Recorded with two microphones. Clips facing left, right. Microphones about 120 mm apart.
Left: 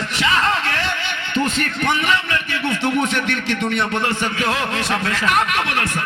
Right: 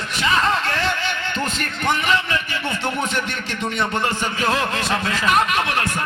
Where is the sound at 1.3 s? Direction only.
70° left (ahead or behind).